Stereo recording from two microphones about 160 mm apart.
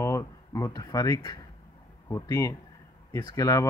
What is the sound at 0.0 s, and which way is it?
Speech, 20° left (ahead or behind).